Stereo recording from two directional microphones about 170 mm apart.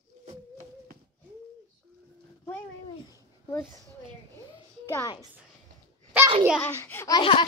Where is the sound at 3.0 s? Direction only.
20° left (ahead or behind).